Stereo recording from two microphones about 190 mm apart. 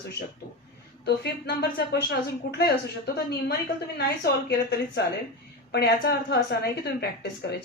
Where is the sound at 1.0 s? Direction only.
60° left (ahead or behind).